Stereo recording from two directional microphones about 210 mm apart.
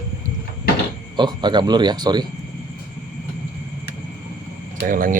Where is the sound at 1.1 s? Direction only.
20° right (ahead or behind).